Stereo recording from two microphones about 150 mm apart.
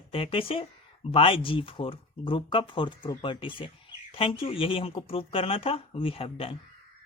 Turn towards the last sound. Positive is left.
turn(degrees=40)  # may be behind; listen again after turning